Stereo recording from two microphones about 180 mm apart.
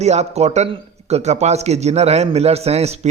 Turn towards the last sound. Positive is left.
turn(degrees=-35)  # may be behind; listen again after turning